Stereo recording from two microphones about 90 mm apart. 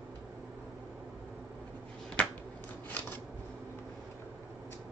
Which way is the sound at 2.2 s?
15° left (ahead or behind).